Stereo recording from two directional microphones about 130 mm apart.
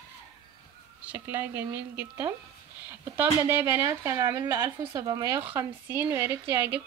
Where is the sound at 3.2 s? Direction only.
15° right (ahead or behind).